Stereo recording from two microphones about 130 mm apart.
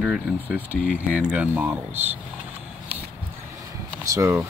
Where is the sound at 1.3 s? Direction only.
10° right (ahead or behind).